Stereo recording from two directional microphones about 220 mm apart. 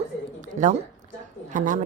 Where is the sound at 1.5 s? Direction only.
35° right (ahead or behind).